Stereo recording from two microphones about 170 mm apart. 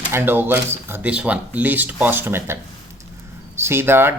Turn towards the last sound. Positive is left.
turn(degrees=-15)  # may be behind; listen again after turning